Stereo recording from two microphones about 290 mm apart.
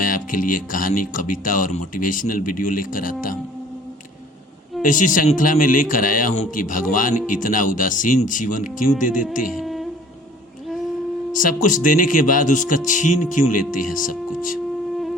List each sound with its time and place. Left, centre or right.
0.0 s speech: left
4.8 s speech: left
9.5 s a sound: centre
11.3 s speech: left